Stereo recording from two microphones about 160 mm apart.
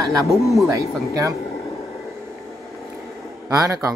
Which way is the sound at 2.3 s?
Centre (ahead or behind).